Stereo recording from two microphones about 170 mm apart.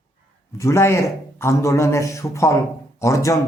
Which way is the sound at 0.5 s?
15° left (ahead or behind).